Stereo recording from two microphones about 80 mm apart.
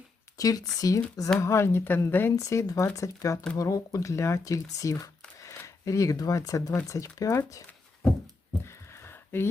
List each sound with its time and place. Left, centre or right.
0.3 s speech: left
1.4 s a woman's voice: left
2.3 s speech: left
9.0 s a sound: left